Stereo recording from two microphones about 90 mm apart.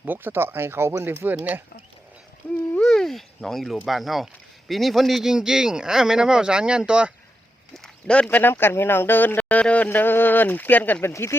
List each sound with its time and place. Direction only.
0.0 s speech: 20° right (ahead or behind)
2.4 s a sound: 20° left (ahead or behind)
2.8 s speech: 5° left (ahead or behind); by 7.1 s 10° right (ahead or behind)
7.8 s speech: 10° left (ahead or behind)
11.1 s speech: 30° left (ahead or behind)